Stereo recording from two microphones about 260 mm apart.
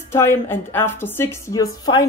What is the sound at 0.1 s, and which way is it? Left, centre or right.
Speech, centre.